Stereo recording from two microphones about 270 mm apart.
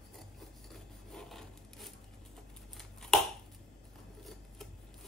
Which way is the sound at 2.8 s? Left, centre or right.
Centre.